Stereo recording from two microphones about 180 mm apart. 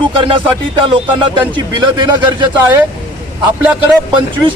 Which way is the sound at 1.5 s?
25° right (ahead or behind).